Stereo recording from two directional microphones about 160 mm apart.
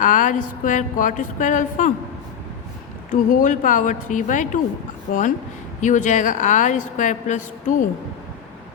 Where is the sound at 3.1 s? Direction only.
55° left (ahead or behind).